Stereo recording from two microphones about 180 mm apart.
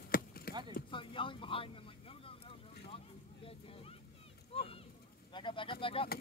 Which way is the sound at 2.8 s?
30° left (ahead or behind).